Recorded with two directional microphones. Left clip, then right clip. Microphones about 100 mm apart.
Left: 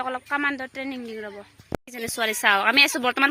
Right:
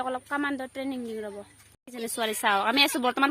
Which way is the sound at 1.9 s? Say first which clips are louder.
Left 3 dB; 10° right (ahead or behind).